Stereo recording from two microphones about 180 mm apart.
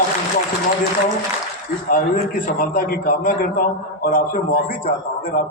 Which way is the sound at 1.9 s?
50° left (ahead or behind).